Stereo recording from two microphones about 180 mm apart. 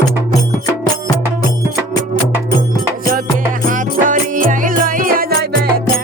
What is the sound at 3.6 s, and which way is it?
Music, 45° right (ahead or behind).